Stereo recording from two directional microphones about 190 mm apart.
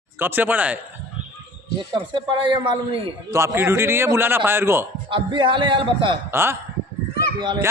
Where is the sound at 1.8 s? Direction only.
25° right (ahead or behind).